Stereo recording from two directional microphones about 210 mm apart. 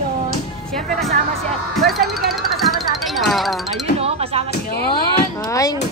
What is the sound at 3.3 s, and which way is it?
Speech, centre (ahead or behind).